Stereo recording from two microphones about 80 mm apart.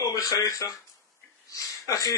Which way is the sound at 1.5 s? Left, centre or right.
Left.